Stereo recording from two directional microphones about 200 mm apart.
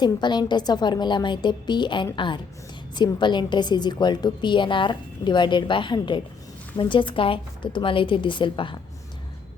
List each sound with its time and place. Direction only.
0.0 s a woman's voice: 20° left (ahead or behind)